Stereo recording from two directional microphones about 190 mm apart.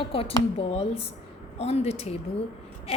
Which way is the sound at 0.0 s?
30° left (ahead or behind).